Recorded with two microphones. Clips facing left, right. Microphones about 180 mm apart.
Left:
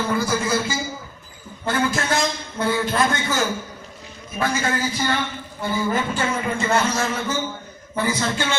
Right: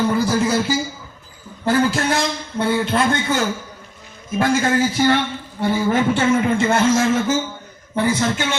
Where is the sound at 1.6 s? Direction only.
35° right (ahead or behind).